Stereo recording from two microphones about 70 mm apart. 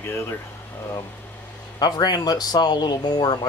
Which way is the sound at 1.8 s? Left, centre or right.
Left.